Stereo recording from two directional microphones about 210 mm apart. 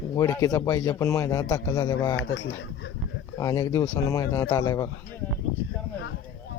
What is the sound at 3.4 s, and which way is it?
A man's voice, 15° left (ahead or behind).